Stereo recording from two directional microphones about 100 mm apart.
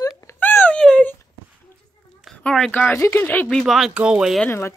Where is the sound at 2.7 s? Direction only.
20° left (ahead or behind).